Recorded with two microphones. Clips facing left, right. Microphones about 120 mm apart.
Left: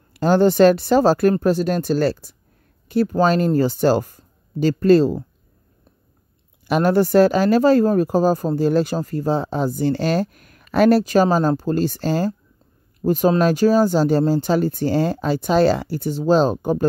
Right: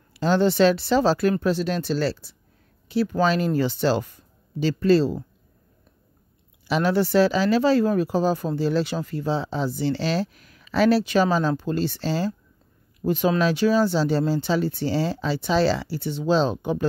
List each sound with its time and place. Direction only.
0.1 s speech: 50° left (ahead or behind)
6.7 s speech: 45° left (ahead or behind)